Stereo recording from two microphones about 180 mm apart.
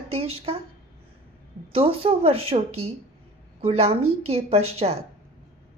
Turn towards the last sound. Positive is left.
turn(degrees=-35)  # may be behind; listen again after turning